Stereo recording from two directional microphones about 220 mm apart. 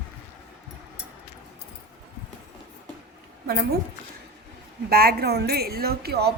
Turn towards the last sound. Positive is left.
turn(degrees=-45)  # may be behind; listen again after turning